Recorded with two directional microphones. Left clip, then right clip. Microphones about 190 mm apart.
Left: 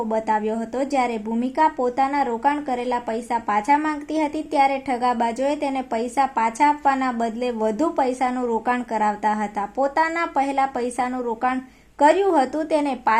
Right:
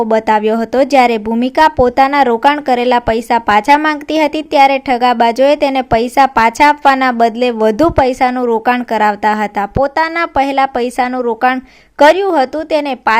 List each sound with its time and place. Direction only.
0.1 s speech: 35° right (ahead or behind)